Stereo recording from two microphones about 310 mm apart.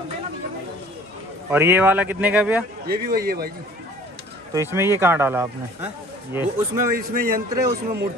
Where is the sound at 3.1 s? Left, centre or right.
Right.